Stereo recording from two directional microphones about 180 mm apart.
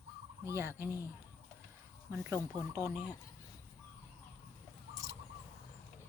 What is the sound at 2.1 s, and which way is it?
Speech, 15° right (ahead or behind).